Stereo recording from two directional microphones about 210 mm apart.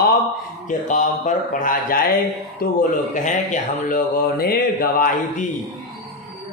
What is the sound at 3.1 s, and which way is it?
Mantra, 40° left (ahead or behind).